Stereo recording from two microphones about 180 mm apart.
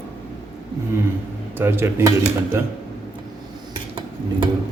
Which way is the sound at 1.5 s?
10° right (ahead or behind).